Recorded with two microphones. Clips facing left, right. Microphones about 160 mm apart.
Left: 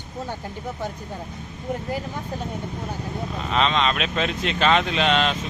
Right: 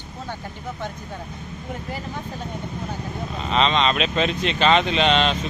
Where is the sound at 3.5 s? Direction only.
Centre (ahead or behind).